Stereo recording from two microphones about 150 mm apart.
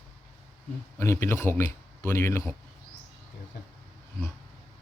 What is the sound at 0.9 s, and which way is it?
Speech, 15° left (ahead or behind).